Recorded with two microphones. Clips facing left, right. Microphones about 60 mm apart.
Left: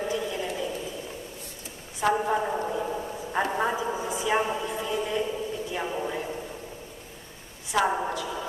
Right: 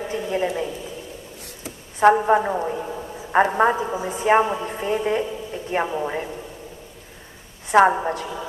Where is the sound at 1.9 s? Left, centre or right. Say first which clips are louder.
Right 9 dB; right.